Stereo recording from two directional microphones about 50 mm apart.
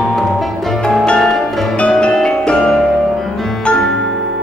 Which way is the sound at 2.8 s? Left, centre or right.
Centre.